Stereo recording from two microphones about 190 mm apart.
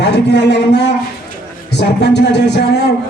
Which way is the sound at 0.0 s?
65° left (ahead or behind).